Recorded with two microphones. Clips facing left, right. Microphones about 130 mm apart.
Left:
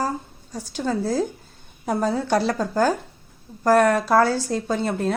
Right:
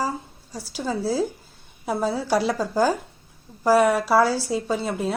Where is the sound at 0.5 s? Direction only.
10° right (ahead or behind).